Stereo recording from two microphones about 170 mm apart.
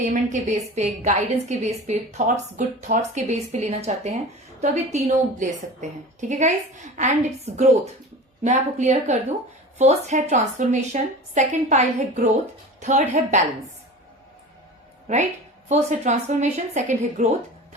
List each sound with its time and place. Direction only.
0.0 s a woman's voice: 45° right (ahead or behind)
15.0 s a woman's voice: 45° right (ahead or behind)